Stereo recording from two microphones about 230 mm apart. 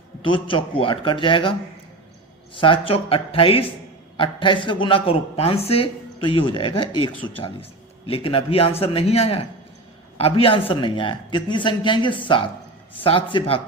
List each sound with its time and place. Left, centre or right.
0.2 s speech: left
2.6 s speech: left